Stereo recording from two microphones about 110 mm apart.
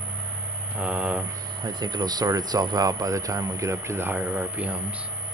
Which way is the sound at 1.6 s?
35° right (ahead or behind).